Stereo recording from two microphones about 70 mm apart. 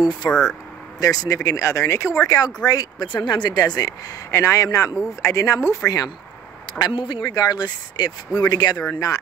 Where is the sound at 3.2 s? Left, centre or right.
Left.